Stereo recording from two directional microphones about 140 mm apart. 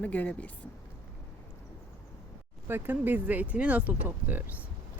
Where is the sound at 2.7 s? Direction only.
15° right (ahead or behind).